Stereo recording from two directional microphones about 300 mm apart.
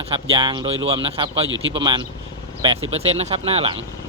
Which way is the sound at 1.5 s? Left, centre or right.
Right.